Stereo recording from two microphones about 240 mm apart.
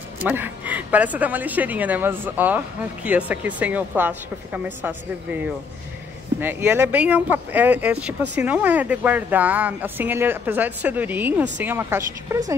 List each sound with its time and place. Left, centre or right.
0.2 s speech: centre